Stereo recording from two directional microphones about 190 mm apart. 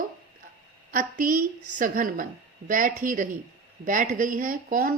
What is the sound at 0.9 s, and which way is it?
A woman's voice, 45° right (ahead or behind).